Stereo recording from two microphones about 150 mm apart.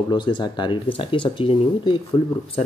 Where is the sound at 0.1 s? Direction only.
30° left (ahead or behind).